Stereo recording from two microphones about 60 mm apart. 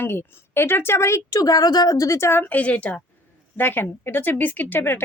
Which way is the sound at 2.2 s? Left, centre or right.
Left.